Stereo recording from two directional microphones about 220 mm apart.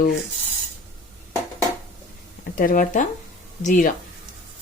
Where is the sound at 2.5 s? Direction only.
40° left (ahead or behind).